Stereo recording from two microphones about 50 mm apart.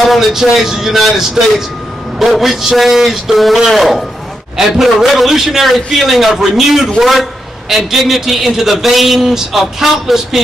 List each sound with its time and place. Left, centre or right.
0.1 s a man's voice: centre